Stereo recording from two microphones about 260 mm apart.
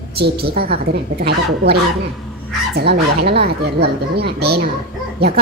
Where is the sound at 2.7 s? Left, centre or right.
Right.